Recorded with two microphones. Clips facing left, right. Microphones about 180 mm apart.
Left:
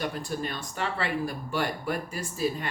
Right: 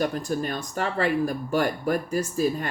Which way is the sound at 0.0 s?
45° right (ahead or behind).